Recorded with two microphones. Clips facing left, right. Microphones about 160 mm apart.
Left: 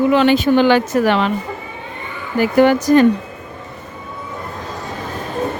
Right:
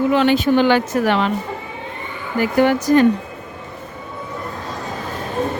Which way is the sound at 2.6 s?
90° left.